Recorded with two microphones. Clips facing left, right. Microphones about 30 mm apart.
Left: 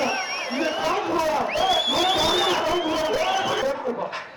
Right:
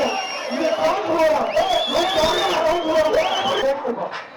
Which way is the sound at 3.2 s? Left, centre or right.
Right.